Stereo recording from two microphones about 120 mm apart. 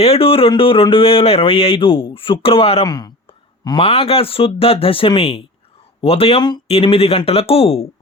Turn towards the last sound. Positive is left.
turn(degrees=55)  # may be behind; listen again after turning